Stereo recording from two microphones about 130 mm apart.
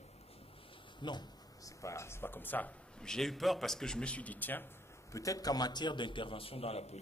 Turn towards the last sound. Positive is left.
turn(degrees=50)  # may be behind; listen again after turning